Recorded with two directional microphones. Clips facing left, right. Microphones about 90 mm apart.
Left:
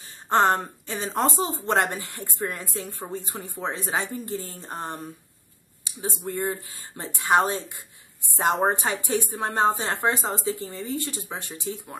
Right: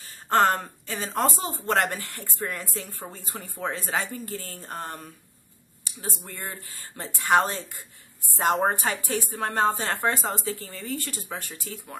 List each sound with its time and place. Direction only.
0.3 s speech: 20° left (ahead or behind)
5.9 s a sound: 15° left (ahead or behind)
6.2 s speech: 15° left (ahead or behind)